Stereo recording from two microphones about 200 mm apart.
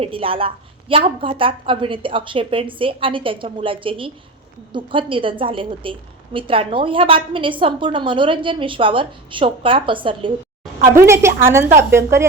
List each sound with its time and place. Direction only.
0.0 s a woman's voice: 25° right (ahead or behind)
10.9 s a woman's voice: 15° right (ahead or behind)